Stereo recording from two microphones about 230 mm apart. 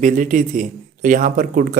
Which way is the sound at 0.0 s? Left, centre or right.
Right.